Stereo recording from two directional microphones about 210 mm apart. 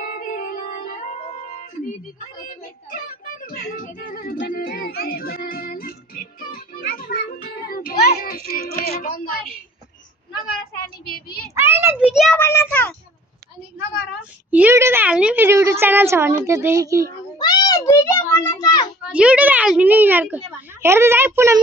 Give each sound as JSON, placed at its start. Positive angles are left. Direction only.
{"t": 0.0, "sound": "music", "side_deg": 40}
{"t": 2.4, "sound": "child singing", "side_deg": 40}
{"t": 11.1, "sound": "speech", "side_deg": 45}
{"t": 11.5, "sound": "a woman's voice", "side_deg": -10}
{"t": 12.4, "sound": "a child's voice", "side_deg": 10}
{"t": 14.5, "sound": "a woman's voice", "side_deg": -10}
{"t": 17.4, "sound": "a sound", "side_deg": 20}
{"t": 19.0, "sound": "a child's voice", "side_deg": -5}